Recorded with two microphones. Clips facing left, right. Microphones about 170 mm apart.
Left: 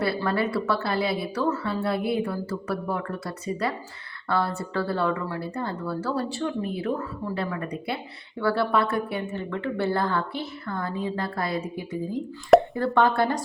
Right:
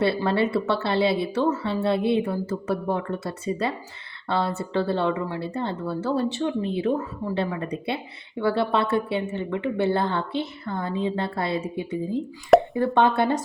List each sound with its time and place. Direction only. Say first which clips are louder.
0.0 s speech: right 3 dB; 25° right (ahead or behind)